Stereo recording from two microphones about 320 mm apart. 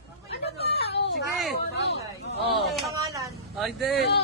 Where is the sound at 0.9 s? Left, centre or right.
Left.